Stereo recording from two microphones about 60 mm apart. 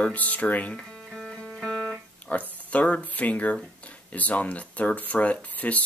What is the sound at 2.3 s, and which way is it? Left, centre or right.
Speech, left.